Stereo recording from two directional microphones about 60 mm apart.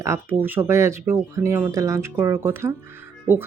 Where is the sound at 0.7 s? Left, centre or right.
Right.